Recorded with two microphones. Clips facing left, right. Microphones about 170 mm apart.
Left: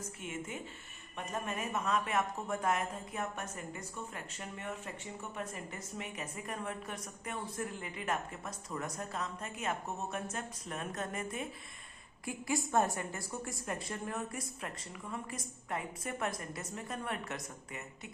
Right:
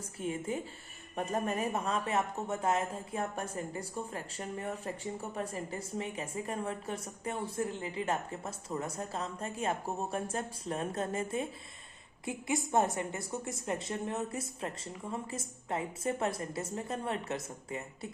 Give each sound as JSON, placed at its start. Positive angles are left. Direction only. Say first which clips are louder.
{"t": 0.2, "sound": "a woman's voice", "louder": "right 8 dB", "side_deg": -35}